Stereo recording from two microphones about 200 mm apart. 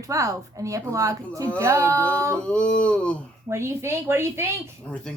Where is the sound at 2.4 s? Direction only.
5° left (ahead or behind).